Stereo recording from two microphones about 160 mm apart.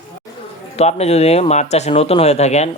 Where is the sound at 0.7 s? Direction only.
40° left (ahead or behind).